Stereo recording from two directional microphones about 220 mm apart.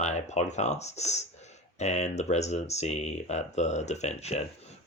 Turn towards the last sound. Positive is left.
turn(degrees=30)  # may be behind; listen again after turning